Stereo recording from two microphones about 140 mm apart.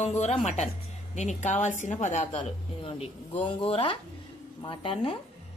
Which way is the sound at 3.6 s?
40° left (ahead or behind).